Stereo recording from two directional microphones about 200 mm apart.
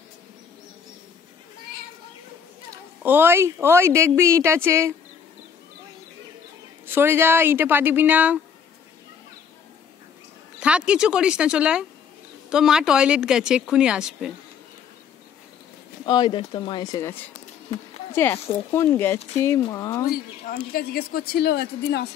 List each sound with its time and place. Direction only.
2.7 s speech: 10° right (ahead or behind)
6.9 s speech: 10° right (ahead or behind)
10.6 s speech: 5° right (ahead or behind)
16.1 s speech: 25° left (ahead or behind)
20.7 s a woman's voice: 50° left (ahead or behind)